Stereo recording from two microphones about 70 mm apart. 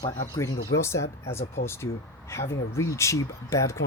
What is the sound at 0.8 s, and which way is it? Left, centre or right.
Speech, left.